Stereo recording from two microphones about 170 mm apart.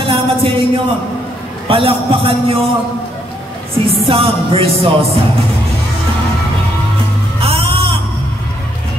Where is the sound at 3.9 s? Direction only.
35° right (ahead or behind).